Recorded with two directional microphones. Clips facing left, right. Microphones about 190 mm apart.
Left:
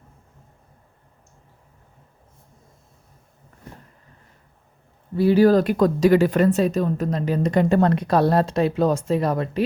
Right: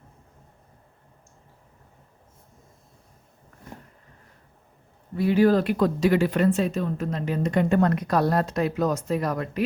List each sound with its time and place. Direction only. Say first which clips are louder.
5.1 s speech: left 4 dB; 35° left (ahead or behind)